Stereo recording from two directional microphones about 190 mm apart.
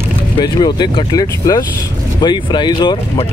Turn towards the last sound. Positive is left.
turn(degrees=20)  # may be behind; listen again after turning